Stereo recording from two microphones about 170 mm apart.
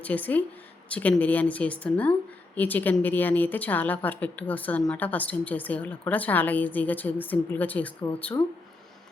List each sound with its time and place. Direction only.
0.0 s a woman's voice: 10° left (ahead or behind)